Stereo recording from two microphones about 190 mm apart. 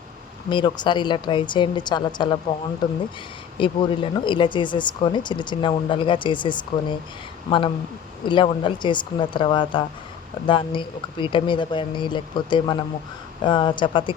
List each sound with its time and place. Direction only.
0.5 s speech: 25° left (ahead or behind)
8.2 s speech: 25° left (ahead or behind)